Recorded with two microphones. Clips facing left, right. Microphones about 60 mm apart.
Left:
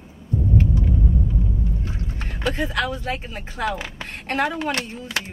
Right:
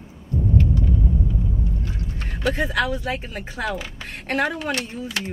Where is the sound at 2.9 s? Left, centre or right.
Centre.